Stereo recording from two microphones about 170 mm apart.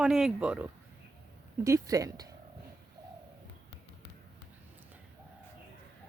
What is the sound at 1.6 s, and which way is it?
Speech, 20° right (ahead or behind).